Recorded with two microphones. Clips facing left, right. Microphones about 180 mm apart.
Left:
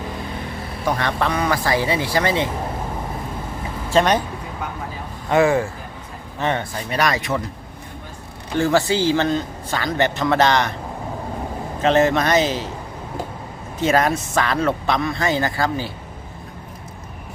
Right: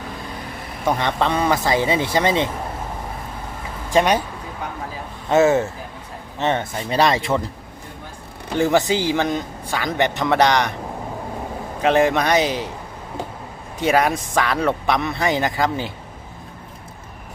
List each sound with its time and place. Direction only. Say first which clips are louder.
0.9 s speech: right 1 dB; 20° right (ahead or behind)
3.8 s speech: even; 10° right (ahead or behind)
5.3 s speech: right 1 dB; 25° right (ahead or behind)
8.5 s a man's voice: even; 20° right (ahead or behind)
11.8 s a man's voice: even; 10° right (ahead or behind)
13.7 s a man's voice: even; 10° right (ahead or behind)